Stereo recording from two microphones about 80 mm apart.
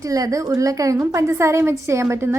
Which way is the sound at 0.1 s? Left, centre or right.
Right.